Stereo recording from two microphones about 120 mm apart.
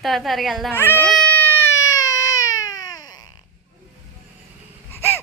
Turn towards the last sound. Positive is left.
turn(degrees=20)  # may be behind; listen again after turning